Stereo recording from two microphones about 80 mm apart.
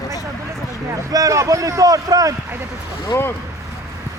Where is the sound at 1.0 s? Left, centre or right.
Right.